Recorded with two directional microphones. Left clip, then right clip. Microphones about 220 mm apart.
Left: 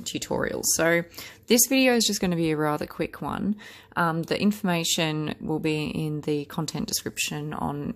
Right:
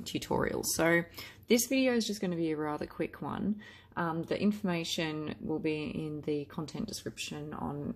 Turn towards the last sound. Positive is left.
turn(degrees=35)  # may be behind; listen again after turning